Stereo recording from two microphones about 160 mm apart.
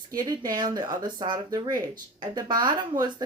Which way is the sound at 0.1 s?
25° right (ahead or behind).